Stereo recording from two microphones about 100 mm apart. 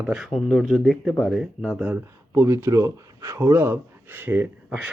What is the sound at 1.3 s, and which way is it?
Speech, 5° right (ahead or behind).